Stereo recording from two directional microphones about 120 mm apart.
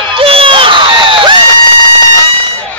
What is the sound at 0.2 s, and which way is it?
Crowd, 50° right (ahead or behind).